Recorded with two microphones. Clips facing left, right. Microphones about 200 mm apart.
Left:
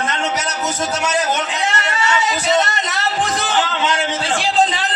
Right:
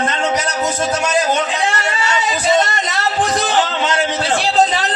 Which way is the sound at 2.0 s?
30° right (ahead or behind).